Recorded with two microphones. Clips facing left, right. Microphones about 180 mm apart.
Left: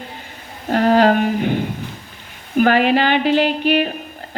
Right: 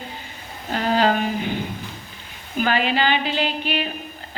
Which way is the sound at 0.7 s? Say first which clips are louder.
Left 6 dB; 60° left (ahead or behind).